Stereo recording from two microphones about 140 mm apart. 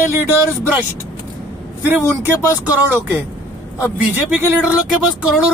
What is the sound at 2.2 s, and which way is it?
Speech, 15° right (ahead or behind).